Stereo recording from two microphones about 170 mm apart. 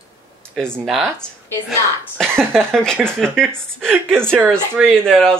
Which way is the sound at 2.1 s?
5° left (ahead or behind).